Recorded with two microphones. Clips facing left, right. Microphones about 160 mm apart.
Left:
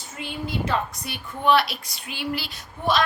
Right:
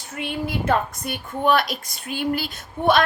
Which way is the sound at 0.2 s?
60° right (ahead or behind).